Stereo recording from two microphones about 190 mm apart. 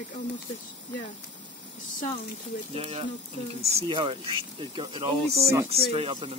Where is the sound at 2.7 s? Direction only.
30° right (ahead or behind).